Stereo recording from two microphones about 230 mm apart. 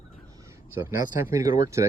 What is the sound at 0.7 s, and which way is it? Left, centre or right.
Speech, centre.